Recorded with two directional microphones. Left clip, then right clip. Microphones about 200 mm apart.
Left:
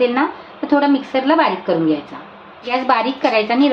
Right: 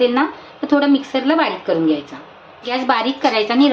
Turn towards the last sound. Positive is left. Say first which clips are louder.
# even
turn(degrees=-5)  # may be behind; listen again after turning